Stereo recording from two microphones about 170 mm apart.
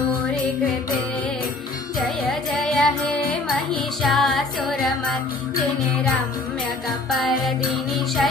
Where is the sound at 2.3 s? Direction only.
Centre (ahead or behind).